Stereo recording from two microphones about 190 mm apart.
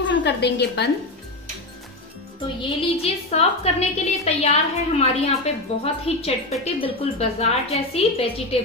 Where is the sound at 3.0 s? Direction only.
35° left (ahead or behind).